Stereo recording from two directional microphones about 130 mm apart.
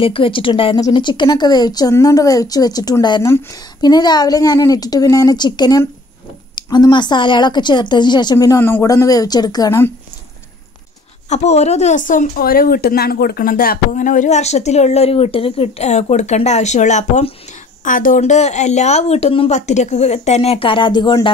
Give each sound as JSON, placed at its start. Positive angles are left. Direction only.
{"t": 0.0, "sound": "speech", "side_deg": 45}
{"t": 8.5, "sound": "speech", "side_deg": 15}
{"t": 11.2, "sound": "speech", "side_deg": 60}
{"t": 17.8, "sound": "speech", "side_deg": 90}
{"t": 19.6, "sound": "speech", "side_deg": 60}